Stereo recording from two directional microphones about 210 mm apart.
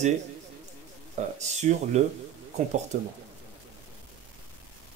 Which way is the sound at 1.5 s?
35° right (ahead or behind).